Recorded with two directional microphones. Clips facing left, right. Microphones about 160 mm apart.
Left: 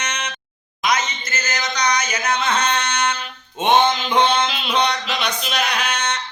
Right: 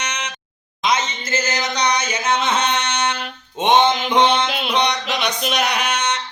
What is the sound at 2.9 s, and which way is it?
Music, 20° right (ahead or behind).